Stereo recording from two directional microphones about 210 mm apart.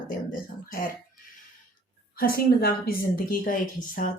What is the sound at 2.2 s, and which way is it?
A woman's voice, 45° left (ahead or behind).